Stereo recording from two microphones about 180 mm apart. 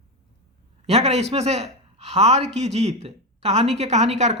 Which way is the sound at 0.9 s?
35° right (ahead or behind).